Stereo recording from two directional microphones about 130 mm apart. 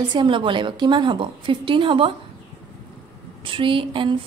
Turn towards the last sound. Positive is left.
turn(degrees=-40)  # may be behind; listen again after turning